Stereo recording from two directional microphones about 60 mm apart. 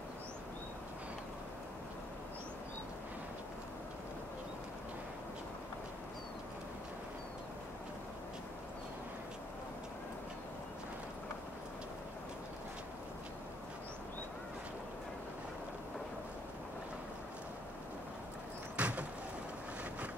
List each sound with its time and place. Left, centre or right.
18.8 s vehicle: right